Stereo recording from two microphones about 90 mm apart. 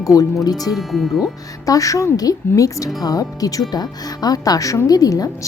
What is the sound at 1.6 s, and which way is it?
Speech, 40° left (ahead or behind).